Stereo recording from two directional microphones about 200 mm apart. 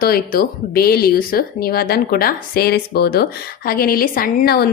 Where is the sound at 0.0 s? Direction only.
45° left (ahead or behind).